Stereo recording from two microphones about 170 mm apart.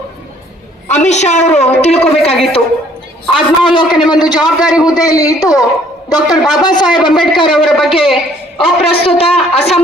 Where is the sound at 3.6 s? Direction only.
25° left (ahead or behind).